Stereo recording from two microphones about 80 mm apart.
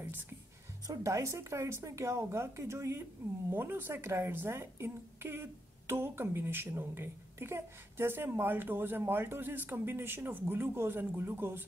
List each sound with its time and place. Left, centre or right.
0.8 s speech: right